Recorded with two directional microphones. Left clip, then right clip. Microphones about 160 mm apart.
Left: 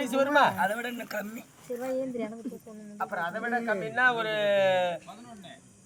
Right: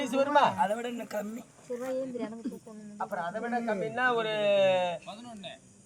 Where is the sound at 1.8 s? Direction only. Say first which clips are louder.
Left 2 dB; 55° left (ahead or behind).